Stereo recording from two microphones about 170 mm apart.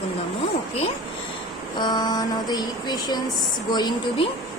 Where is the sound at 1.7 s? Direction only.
25° left (ahead or behind).